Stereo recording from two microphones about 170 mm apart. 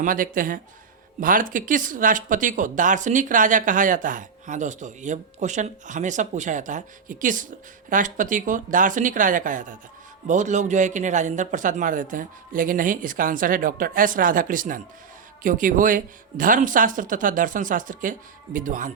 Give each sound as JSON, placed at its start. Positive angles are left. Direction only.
{"t": 0.0, "sound": "speech", "side_deg": -55}